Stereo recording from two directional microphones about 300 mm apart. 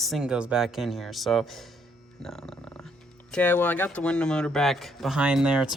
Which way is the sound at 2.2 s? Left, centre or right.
Centre.